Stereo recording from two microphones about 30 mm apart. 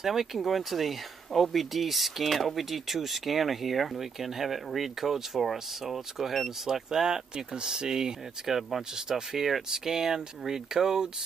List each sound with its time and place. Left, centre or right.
0.0 s speech: centre
6.6 s speech: centre
8.5 s speech: centre